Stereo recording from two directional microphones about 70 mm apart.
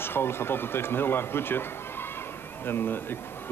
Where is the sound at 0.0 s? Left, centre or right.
Left.